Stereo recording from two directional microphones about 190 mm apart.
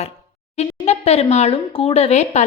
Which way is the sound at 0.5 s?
35° left (ahead or behind).